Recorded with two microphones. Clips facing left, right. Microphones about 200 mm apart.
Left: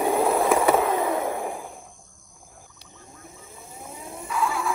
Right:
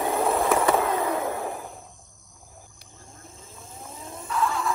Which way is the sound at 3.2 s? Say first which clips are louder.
Left 1 dB; 10° left (ahead or behind).